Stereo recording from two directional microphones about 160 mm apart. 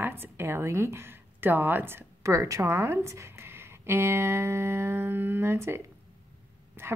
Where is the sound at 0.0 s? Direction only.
15° right (ahead or behind).